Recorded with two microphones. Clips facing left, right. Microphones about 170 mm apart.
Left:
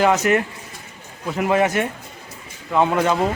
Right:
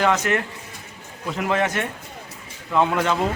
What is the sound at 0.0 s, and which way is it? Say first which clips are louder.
A man's voice: left 4 dB; 10° left (ahead or behind).